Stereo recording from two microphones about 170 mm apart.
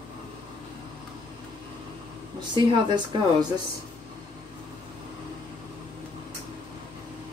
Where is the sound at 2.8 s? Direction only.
25° right (ahead or behind).